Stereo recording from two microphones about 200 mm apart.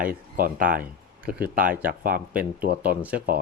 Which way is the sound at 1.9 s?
45° right (ahead or behind).